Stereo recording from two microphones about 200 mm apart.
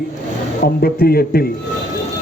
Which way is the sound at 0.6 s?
50° left (ahead or behind).